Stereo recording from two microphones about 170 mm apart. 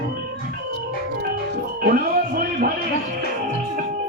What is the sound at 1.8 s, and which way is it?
Music, 60° right (ahead or behind).